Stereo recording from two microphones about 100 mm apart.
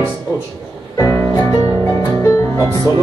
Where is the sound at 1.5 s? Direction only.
35° left (ahead or behind).